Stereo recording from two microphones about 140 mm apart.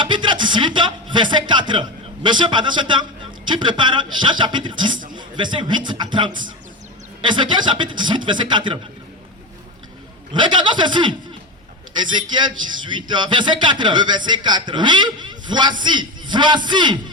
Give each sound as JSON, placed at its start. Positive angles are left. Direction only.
{"t": 0.0, "sound": "a man's voice", "side_deg": -35}
{"t": 10.4, "sound": "speech", "side_deg": -35}